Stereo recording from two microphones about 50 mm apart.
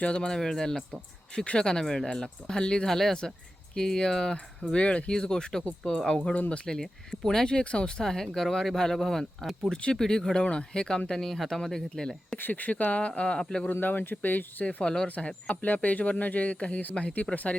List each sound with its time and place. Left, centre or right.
0.0 s speech: left
0.3 s speech: centre
6.7 s speech: centre
12.4 s speech: left
13.4 s speech: centre
13.7 s speech: left
14.6 s speech: left
15.6 s speech: left